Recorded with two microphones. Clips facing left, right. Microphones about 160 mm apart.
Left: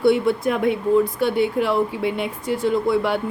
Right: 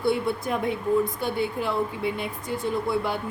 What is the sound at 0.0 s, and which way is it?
Speech, 75° left (ahead or behind).